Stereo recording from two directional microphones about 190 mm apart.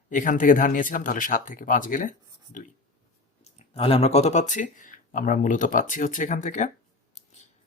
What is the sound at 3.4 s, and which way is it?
Speech, 30° left (ahead or behind).